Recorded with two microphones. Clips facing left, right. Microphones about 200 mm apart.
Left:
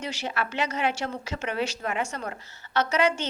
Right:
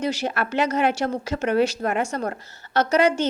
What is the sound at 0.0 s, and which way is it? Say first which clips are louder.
A woman's voice: right 6 dB; 45° right (ahead or behind).